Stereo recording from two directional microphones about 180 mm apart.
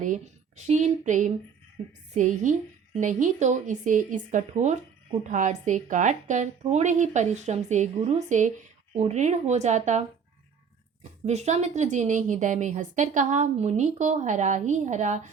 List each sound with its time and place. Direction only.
0.0 s a woman's voice: 45° right (ahead or behind)
11.3 s a woman's voice: 40° right (ahead or behind)